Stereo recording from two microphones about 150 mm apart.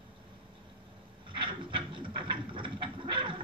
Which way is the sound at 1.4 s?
35° right (ahead or behind).